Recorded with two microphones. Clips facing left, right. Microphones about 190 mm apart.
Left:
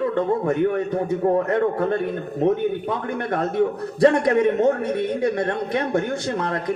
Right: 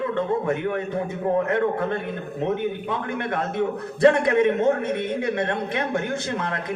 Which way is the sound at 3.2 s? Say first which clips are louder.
Left 5 dB; 40° left (ahead or behind).